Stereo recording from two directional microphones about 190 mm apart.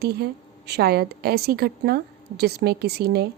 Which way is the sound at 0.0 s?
55° right (ahead or behind).